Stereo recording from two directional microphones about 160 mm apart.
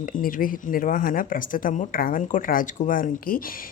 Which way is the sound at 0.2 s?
60° left (ahead or behind).